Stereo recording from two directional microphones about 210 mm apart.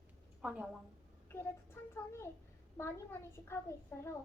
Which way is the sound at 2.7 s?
10° left (ahead or behind).